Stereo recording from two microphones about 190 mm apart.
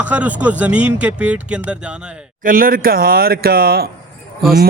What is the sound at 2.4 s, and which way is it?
Speech, 50° right (ahead or behind).